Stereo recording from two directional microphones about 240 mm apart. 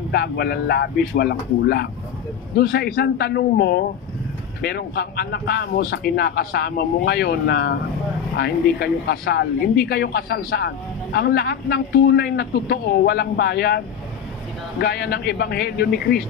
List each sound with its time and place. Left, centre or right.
0.1 s a man's voice: left
2.5 s a man's voice: left